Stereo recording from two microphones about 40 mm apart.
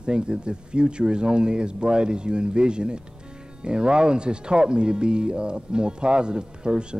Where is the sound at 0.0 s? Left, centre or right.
Right.